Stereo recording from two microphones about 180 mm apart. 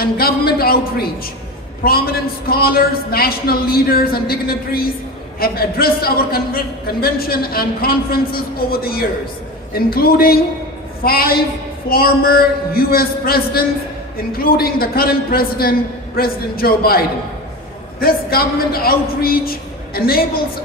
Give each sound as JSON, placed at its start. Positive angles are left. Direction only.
{"t": 0.0, "sound": "a sound", "side_deg": 55}
{"t": 1.9, "sound": "a man's voice", "side_deg": 55}
{"t": 18.0, "sound": "a man's voice", "side_deg": 55}